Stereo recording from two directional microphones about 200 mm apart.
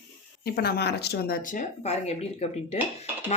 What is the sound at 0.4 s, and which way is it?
A woman's voice, 50° left (ahead or behind).